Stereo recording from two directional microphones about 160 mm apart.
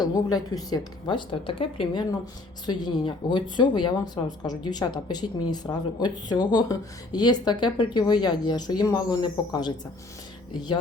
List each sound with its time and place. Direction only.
0.0 s a woman's voice: 25° left (ahead or behind)